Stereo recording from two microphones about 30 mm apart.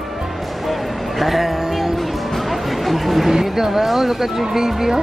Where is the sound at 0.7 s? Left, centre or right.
Centre.